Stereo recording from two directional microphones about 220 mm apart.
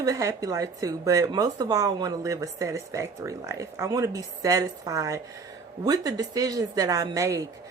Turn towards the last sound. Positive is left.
turn(degrees=-15)  # may be behind; listen again after turning